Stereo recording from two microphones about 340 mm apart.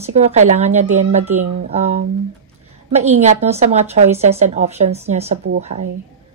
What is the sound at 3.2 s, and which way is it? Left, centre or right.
A woman's voice, centre.